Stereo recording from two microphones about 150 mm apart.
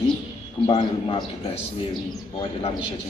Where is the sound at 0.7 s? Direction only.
35° left (ahead or behind).